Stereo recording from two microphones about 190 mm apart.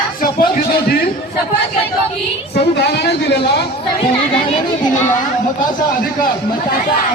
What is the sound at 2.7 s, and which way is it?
Speech, 60° left (ahead or behind).